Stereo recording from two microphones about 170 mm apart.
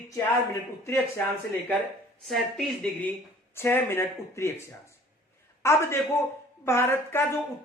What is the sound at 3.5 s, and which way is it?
A woman's voice, 15° left (ahead or behind).